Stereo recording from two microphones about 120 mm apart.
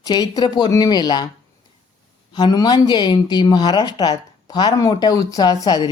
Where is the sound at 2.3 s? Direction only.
35° left (ahead or behind).